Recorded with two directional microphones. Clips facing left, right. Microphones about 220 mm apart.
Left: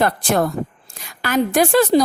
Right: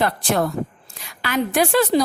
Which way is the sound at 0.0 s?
45° left (ahead or behind).